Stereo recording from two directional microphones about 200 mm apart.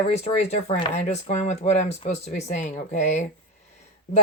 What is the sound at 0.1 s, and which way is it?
Speech, 35° left (ahead or behind).